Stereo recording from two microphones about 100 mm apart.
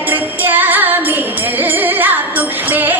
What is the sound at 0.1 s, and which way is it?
Music, 20° right (ahead or behind).